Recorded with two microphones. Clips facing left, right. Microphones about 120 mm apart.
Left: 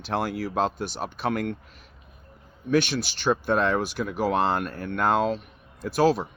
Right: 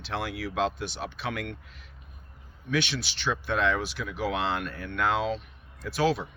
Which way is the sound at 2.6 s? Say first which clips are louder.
Left 6 dB; 45° left (ahead or behind).